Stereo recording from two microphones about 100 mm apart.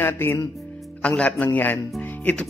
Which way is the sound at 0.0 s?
25° left (ahead or behind).